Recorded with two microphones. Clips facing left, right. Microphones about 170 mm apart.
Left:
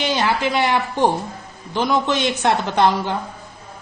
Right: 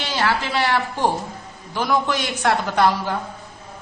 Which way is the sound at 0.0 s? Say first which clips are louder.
Left 3 dB; 20° left (ahead or behind).